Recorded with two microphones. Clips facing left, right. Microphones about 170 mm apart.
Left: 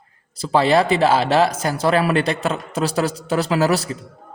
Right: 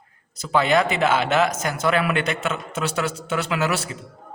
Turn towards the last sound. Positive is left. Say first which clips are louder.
# left 6 dB
turn(degrees=35)  # may be behind; listen again after turning